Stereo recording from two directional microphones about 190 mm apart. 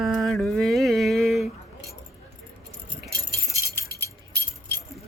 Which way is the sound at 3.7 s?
60° right (ahead or behind).